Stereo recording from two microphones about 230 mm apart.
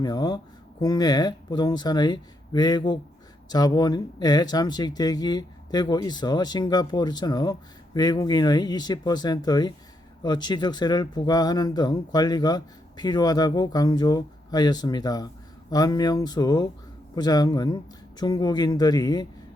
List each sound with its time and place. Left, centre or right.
0.0 s speech: centre